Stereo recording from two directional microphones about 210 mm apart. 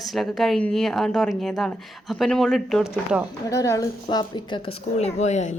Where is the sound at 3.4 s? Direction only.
15° left (ahead or behind).